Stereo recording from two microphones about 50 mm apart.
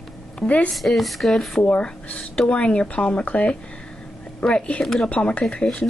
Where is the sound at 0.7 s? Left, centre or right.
Centre.